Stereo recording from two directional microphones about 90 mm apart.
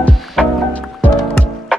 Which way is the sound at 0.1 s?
Centre (ahead or behind).